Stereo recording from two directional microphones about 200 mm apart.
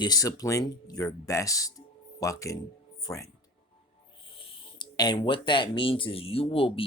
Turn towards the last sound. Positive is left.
turn(degrees=30)  # may be behind; listen again after turning